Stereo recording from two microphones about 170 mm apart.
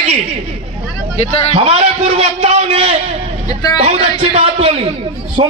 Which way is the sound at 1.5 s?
35° right (ahead or behind).